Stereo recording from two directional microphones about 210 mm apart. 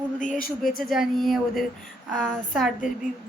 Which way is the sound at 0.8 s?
Centre (ahead or behind).